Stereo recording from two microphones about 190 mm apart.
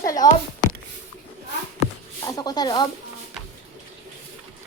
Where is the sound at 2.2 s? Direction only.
20° left (ahead or behind).